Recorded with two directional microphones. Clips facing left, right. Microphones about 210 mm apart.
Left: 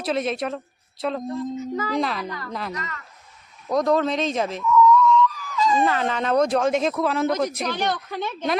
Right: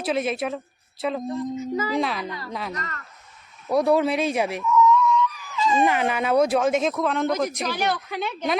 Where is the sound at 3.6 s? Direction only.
10° right (ahead or behind).